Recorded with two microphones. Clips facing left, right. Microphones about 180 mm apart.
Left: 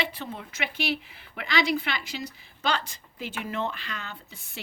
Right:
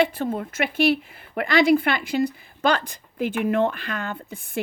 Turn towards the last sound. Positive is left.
turn(degrees=-50)  # may be behind; listen again after turning